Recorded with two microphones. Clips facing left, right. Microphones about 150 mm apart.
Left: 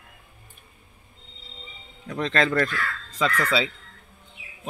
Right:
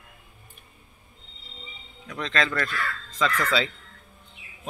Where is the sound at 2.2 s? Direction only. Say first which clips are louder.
Left 4 dB; 25° left (ahead or behind).